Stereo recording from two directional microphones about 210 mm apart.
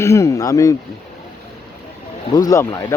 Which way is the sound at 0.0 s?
15° left (ahead or behind).